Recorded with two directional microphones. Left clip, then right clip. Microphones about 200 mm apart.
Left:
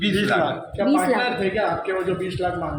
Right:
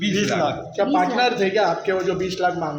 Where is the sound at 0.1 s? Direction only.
30° right (ahead or behind).